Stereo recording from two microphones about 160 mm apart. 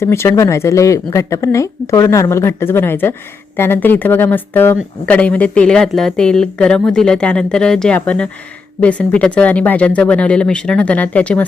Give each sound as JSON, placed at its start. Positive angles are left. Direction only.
{"t": 0.0, "sound": "speech", "side_deg": 15}